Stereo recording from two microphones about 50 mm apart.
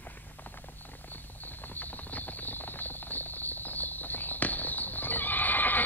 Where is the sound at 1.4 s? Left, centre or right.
Left.